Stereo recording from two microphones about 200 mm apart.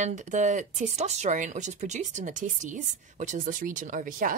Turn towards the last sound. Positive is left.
turn(degrees=-45)  # may be behind; listen again after turning